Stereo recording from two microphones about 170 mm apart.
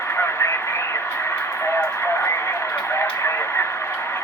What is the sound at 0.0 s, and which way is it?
Radio, 15° left (ahead or behind).